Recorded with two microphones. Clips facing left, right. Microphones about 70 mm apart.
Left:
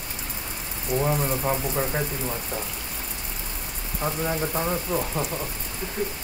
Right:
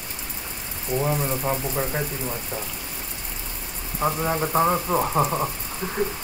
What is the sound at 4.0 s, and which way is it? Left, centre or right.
Speech, right.